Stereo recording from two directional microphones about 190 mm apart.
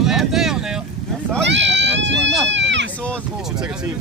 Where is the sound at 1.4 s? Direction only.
70° right (ahead or behind).